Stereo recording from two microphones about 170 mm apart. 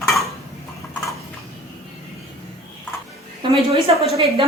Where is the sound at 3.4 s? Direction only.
30° right (ahead or behind).